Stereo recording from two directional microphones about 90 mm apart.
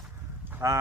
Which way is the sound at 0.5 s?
35° right (ahead or behind).